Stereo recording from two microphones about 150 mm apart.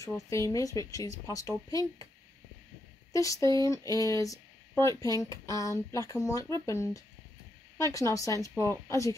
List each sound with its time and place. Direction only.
0.0 s speech: 20° left (ahead or behind)
3.1 s speech: 20° left (ahead or behind)